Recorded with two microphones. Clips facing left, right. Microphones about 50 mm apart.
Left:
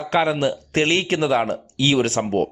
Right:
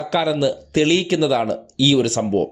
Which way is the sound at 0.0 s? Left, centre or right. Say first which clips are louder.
Right 1 dB; left.